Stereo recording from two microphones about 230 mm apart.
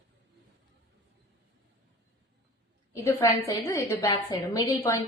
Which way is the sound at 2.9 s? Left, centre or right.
Centre.